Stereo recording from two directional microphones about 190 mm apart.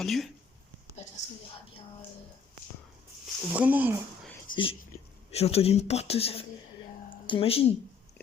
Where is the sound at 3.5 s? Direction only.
10° right (ahead or behind).